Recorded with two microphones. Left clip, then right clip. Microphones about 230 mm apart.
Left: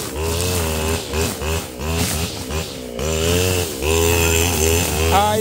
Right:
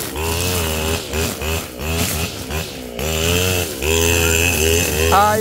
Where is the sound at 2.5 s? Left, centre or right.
Right.